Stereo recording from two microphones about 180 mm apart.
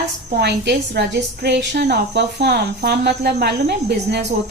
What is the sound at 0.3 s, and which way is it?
A woman's voice, 70° right (ahead or behind).